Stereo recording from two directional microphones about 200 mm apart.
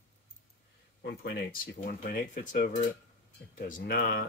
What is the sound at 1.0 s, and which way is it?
Speech, 50° left (ahead or behind).